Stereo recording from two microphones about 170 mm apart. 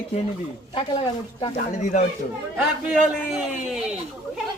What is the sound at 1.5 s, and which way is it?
Speech, 45° left (ahead or behind).